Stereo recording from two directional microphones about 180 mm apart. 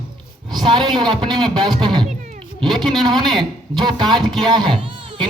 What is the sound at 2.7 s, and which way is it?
Speech, centre (ahead or behind).